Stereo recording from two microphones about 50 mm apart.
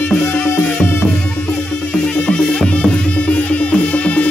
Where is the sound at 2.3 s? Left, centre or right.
Left.